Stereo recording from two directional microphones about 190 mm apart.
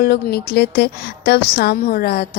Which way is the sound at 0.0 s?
55° left (ahead or behind).